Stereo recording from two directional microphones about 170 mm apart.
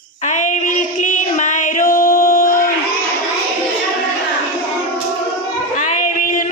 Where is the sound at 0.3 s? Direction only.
45° left (ahead or behind).